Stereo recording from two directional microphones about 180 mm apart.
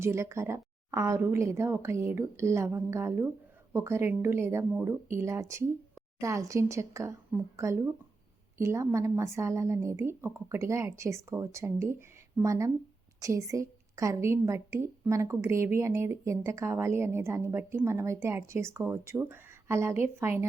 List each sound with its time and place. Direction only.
0.0 s a woman's voice: 15° right (ahead or behind)